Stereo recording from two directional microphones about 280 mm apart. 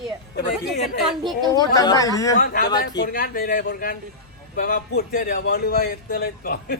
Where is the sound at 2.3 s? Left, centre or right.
Left.